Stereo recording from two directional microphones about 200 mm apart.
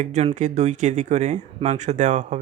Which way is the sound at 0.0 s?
35° right (ahead or behind).